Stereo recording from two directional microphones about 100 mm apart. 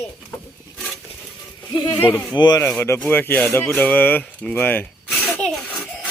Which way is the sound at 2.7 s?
25° left (ahead or behind).